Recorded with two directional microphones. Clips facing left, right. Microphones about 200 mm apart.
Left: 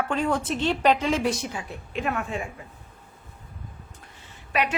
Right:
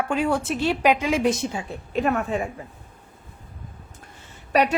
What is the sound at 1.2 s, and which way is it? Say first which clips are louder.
Speech: right 4 dB; 25° right (ahead or behind).